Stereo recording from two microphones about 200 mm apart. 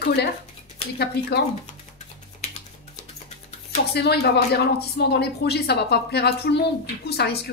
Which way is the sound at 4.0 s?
55° left (ahead or behind).